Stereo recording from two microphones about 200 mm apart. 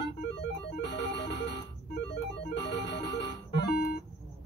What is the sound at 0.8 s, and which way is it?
Music, 60° left (ahead or behind).